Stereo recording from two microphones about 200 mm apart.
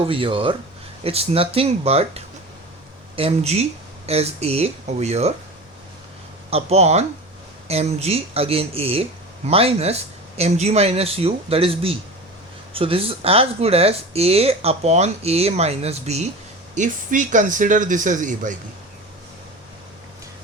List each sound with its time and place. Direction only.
0.0 s speech: 25° right (ahead or behind)
6.5 s speech: 30° right (ahead or behind)